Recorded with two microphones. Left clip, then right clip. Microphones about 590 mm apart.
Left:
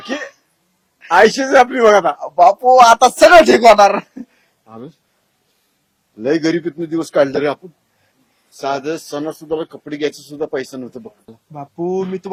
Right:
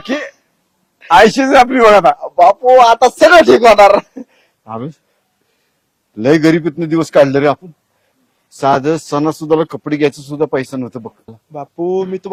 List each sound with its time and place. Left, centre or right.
0.0 s a sound: right
1.0 s a man's voice: right
2.1 s speech: centre
4.6 s speech: right
6.2 s a man's voice: right
8.4 s speech: right
11.5 s speech: centre